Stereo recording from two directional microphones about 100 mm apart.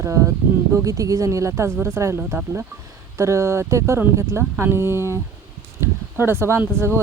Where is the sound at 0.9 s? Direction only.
35° right (ahead or behind).